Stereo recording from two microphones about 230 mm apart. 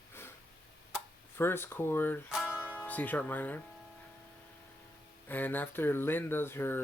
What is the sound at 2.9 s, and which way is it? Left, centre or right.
Speech, centre.